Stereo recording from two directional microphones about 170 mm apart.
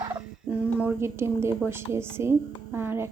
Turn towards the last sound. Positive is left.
turn(degrees=-15)  # may be behind; listen again after turning